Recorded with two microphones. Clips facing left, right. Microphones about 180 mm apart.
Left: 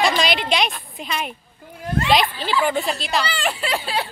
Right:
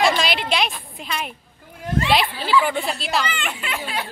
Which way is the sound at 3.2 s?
35° left (ahead or behind).